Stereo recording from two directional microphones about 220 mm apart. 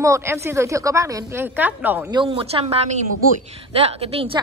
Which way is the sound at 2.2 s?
20° right (ahead or behind).